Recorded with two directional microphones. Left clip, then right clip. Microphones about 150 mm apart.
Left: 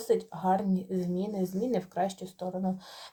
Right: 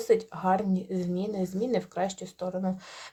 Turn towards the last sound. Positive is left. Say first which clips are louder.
# right 1 dB
turn(degrees=-35)  # may be behind; listen again after turning